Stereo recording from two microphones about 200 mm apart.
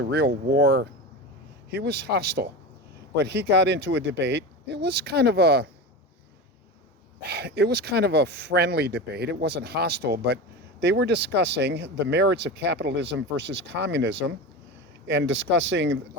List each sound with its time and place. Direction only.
0.0 s speech: 55° right (ahead or behind)
7.2 s speech: 55° right (ahead or behind)